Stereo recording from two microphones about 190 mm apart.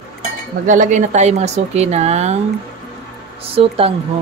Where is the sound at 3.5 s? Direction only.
30° right (ahead or behind).